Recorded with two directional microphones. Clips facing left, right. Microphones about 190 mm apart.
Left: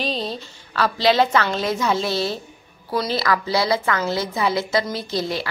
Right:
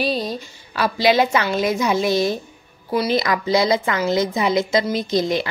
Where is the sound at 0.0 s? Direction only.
10° right (ahead or behind).